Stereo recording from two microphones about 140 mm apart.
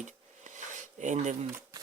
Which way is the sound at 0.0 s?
60° right (ahead or behind).